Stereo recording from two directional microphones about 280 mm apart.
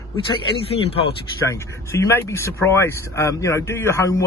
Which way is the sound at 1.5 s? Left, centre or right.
Centre.